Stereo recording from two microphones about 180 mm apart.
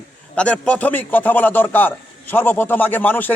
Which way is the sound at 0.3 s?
5° left (ahead or behind).